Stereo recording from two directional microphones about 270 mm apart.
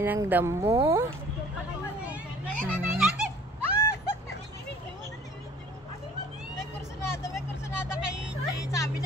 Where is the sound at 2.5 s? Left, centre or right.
Right.